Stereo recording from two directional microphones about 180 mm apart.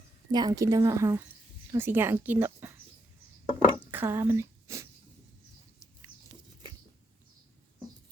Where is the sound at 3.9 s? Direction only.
15° right (ahead or behind).